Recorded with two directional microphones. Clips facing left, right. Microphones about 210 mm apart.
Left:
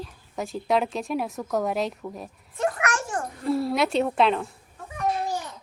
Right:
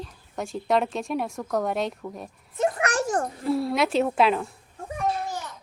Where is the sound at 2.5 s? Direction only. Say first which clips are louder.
Right 2 dB; 25° right (ahead or behind).